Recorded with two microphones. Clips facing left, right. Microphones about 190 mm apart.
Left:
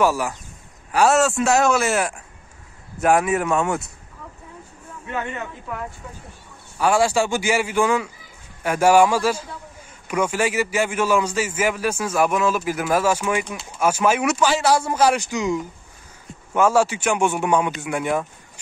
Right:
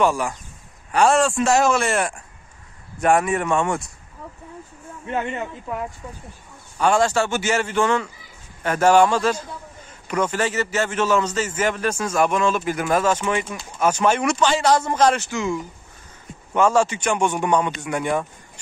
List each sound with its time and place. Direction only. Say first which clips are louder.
0.0 s a man's voice: even; 5° left (ahead or behind)
5.1 s speech: right 3 dB; 25° right (ahead or behind)
6.8 s a man's voice: even; 10° left (ahead or behind)